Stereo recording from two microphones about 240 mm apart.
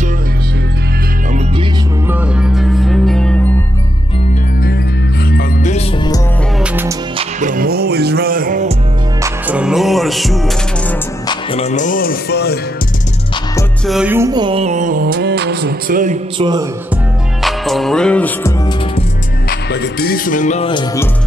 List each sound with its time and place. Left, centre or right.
2.0 s music: centre
5.3 s music: left
6.6 s music: centre
7.2 s music: right
9.2 s music: centre
11.2 s music: left
13.8 s music: centre; by 16.2 s right
16.3 s speech: centre
17.4 s music: centre
19.7 s music: left; by 21.1 s centre